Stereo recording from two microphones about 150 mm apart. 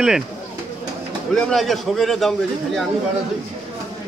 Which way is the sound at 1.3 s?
Centre (ahead or behind).